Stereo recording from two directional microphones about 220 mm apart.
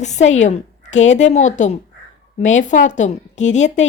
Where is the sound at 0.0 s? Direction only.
30° left (ahead or behind).